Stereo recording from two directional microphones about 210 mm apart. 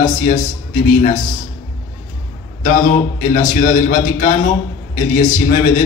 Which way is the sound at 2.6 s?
40° left (ahead or behind).